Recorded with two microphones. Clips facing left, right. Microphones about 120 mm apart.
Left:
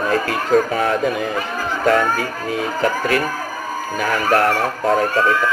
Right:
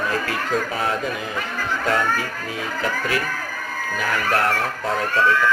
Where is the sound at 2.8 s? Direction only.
55° left (ahead or behind).